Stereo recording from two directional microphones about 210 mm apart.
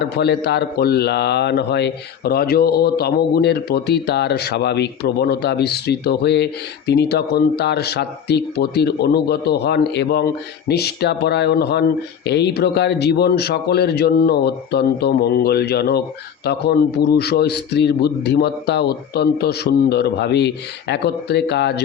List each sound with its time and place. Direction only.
0.0 s a man's voice: 50° left (ahead or behind)